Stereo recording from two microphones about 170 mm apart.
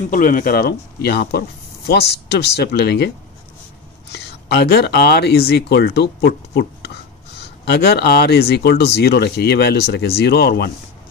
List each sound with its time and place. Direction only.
0.1 s speech: 55° left (ahead or behind); by 3.1 s 80° left
4.1 s speech: 70° left (ahead or behind)